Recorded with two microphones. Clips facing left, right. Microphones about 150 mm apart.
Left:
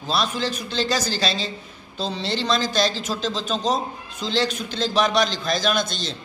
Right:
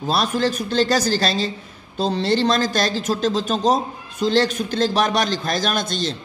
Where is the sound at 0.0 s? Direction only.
45° right (ahead or behind).